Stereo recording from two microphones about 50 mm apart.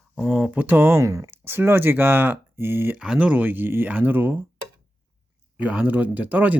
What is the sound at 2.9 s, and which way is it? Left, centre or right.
Speech, centre.